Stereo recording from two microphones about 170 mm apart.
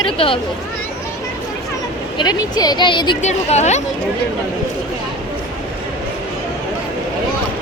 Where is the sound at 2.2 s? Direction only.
25° left (ahead or behind).